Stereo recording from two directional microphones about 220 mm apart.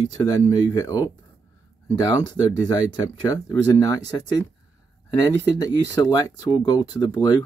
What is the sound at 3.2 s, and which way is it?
Speech, 15° left (ahead or behind).